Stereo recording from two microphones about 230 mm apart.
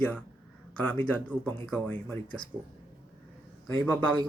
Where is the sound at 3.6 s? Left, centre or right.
Centre.